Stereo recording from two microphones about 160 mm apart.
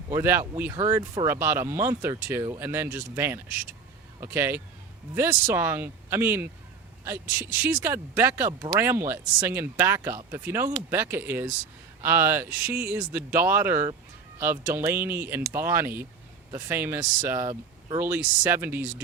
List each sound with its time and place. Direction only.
0.1 s speech: 15° right (ahead or behind)